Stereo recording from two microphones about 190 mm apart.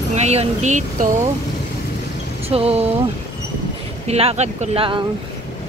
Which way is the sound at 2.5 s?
30° right (ahead or behind).